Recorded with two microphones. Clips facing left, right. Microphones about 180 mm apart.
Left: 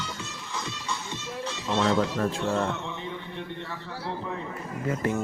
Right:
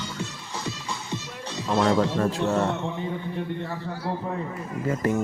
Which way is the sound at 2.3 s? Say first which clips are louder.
Right 3 dB; 40° right (ahead or behind).